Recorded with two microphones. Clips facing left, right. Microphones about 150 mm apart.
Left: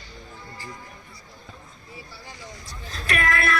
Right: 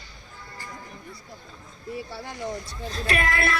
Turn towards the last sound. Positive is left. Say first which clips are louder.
# left 1 dB
turn(degrees=-30)  # may be behind; listen again after turning